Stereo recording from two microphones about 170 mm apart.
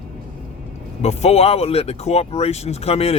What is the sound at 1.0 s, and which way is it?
Speech, 40° left (ahead or behind).